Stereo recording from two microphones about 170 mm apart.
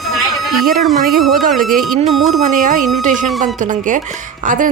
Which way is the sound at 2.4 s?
50° right (ahead or behind).